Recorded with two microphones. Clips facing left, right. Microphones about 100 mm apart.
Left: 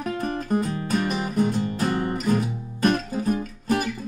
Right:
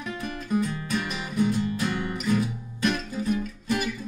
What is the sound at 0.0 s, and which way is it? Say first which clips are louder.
Guitar: left 6 dB; 45° left (ahead or behind).